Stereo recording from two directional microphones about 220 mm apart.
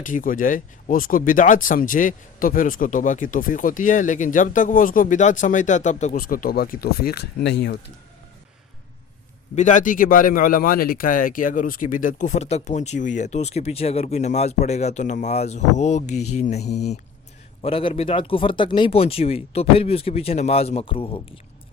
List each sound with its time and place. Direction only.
0.0 s speech: 40° left (ahead or behind)
9.6 s speech: 35° left (ahead or behind)